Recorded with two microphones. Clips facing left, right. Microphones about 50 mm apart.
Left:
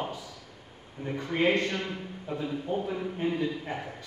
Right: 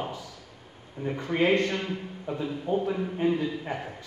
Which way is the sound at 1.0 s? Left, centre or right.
Centre.